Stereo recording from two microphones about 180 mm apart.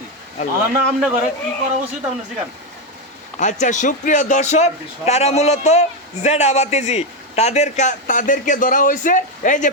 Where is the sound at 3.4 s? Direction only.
45° left (ahead or behind).